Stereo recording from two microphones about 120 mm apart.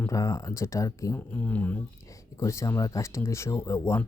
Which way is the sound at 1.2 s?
15° left (ahead or behind).